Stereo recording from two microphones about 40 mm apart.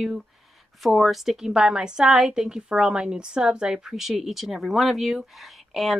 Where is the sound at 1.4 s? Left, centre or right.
Centre.